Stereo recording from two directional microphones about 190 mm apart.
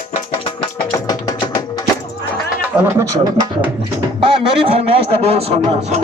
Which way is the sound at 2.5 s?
10° right (ahead or behind).